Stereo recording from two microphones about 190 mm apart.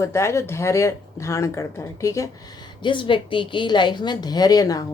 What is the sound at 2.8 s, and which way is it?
A woman's voice, 25° left (ahead or behind).